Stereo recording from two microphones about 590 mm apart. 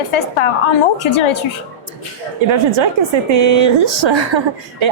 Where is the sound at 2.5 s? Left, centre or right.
Right.